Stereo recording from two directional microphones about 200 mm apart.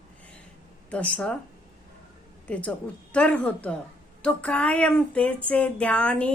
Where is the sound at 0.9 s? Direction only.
5° left (ahead or behind).